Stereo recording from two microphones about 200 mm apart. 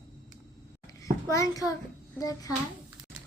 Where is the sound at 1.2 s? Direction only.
15° left (ahead or behind).